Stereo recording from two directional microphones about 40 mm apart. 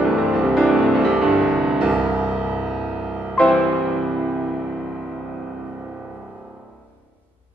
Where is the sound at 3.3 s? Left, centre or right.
Left.